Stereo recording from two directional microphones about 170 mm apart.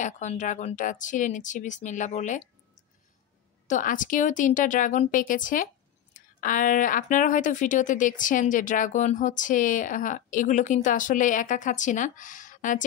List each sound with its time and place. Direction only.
0.0 s a woman's voice: 45° left (ahead or behind)
3.6 s a woman's voice: 50° left (ahead or behind)